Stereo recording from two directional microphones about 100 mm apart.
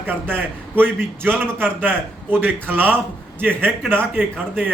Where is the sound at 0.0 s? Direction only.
20° right (ahead or behind).